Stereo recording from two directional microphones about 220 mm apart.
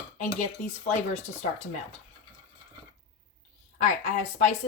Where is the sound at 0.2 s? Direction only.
30° left (ahead or behind).